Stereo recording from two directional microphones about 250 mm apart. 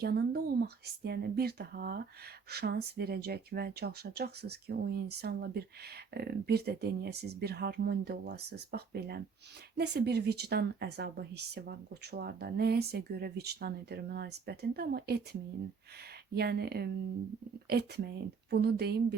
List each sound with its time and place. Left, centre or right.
0.0 s speech: right